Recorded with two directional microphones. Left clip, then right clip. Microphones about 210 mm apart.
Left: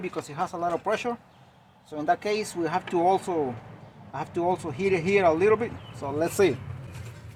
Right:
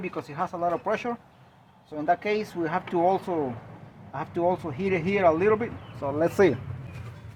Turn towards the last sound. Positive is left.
turn(degrees=-35)  # may be behind; listen again after turning